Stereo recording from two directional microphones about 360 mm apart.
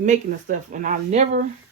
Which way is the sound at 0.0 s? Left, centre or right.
Right.